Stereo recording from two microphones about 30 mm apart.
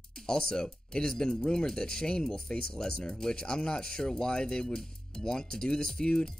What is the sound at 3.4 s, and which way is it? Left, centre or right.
Speech, left.